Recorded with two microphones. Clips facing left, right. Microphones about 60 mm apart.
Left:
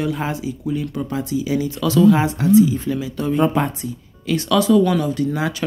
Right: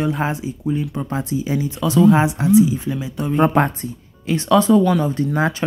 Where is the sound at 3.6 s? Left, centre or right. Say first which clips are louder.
Right 3 dB; right.